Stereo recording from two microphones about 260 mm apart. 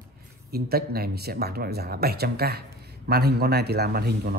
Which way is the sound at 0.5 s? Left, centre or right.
Right.